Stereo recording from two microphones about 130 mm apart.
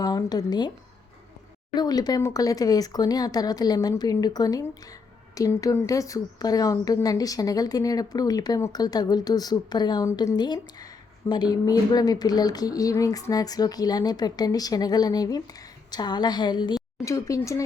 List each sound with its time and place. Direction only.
0.0 s speech: 30° left (ahead or behind)
1.7 s a woman's voice: 30° left (ahead or behind)